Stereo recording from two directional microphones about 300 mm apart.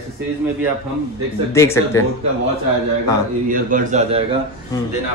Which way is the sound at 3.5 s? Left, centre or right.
Right.